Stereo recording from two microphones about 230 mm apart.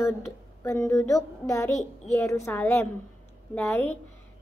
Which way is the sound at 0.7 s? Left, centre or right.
Centre.